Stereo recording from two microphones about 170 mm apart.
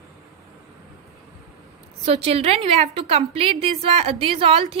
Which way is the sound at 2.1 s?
35° right (ahead or behind).